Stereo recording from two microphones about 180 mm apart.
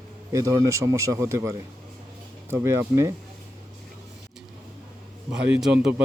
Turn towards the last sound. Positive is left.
turn(degrees=-5)  # may be behind; listen again after turning